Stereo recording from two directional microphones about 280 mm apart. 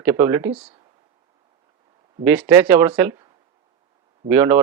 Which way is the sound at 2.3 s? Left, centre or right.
Centre.